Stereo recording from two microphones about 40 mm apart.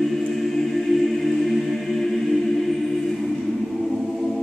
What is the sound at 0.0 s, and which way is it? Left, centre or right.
Choir, centre.